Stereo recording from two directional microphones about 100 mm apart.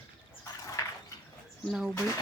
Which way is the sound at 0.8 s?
35° left (ahead or behind).